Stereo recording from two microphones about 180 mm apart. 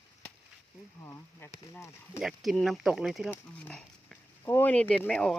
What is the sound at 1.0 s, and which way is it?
Insect, 15° left (ahead or behind).